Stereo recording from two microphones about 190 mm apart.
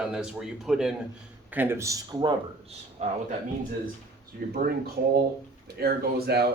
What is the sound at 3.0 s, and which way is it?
Speech, 40° right (ahead or behind).